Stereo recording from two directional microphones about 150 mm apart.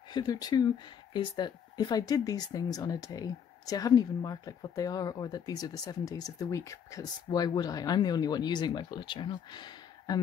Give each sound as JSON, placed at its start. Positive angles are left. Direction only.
{"t": 0.1, "sound": "speech", "side_deg": 25}